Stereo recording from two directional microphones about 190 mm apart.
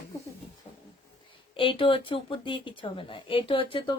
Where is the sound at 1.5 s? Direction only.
25° left (ahead or behind).